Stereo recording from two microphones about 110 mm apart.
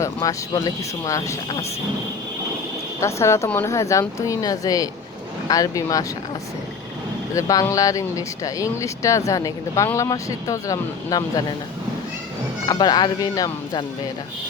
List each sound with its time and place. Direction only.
0.0 s speech: 30° left (ahead or behind)
3.0 s speech: 25° left (ahead or behind)
7.3 s speech: 30° left (ahead or behind)
12.6 s speech: 40° left (ahead or behind)